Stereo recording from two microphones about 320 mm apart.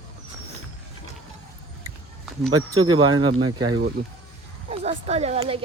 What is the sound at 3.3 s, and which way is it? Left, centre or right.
Speech, right.